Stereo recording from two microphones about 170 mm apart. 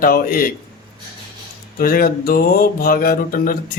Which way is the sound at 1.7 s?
55° left (ahead or behind).